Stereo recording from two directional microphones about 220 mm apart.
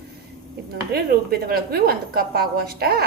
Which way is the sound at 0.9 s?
45° right (ahead or behind).